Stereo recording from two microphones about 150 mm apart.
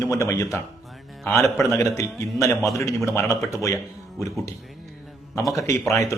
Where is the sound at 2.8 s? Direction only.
20° left (ahead or behind).